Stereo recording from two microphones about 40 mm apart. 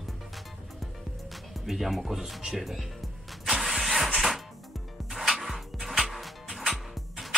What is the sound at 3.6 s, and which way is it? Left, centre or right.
Engine starting, centre.